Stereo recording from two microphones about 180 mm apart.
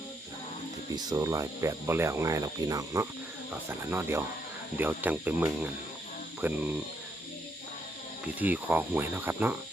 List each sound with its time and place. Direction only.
0.9 s speech: 20° right (ahead or behind)
8.4 s speech: 10° right (ahead or behind)